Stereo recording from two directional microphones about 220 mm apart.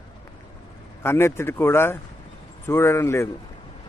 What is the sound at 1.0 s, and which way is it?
Speech, 10° left (ahead or behind).